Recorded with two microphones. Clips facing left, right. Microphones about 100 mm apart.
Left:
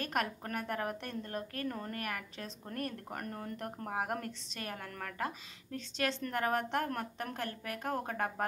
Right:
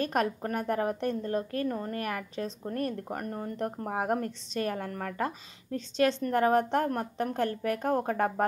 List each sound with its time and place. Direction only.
0.0 s a woman's voice: 35° right (ahead or behind)